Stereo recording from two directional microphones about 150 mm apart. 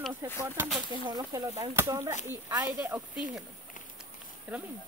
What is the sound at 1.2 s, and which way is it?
Speech, 25° right (ahead or behind).